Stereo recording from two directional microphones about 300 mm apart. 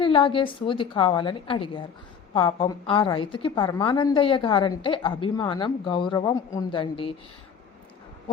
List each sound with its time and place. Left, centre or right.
0.0 s a woman's voice: centre